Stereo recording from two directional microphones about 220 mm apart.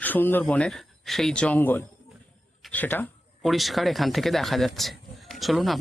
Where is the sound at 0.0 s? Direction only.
10° left (ahead or behind).